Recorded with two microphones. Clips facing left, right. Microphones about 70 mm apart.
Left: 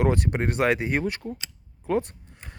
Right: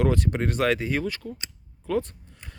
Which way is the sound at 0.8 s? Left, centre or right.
Left.